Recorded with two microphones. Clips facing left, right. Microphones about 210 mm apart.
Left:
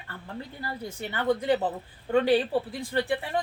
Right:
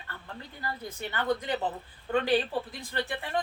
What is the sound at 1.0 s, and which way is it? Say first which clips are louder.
A woman's voice: left 3 dB; 30° left (ahead or behind).